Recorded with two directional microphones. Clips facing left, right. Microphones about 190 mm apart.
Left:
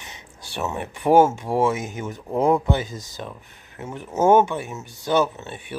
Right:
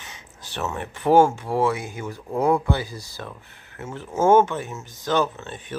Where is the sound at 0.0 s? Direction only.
15° left (ahead or behind).